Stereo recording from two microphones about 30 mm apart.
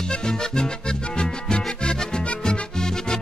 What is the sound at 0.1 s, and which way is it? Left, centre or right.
Music, left.